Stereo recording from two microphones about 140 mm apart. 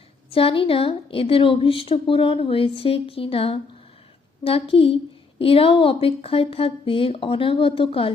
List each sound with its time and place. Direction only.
0.3 s a woman's voice: 40° left (ahead or behind)